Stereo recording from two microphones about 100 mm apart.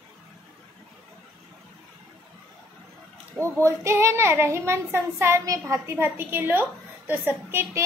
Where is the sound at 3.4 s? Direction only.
30° right (ahead or behind).